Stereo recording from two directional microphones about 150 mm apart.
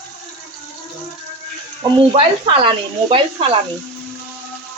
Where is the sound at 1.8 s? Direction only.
35° right (ahead or behind).